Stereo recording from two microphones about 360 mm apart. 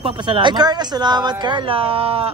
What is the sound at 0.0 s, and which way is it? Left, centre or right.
Speech, centre.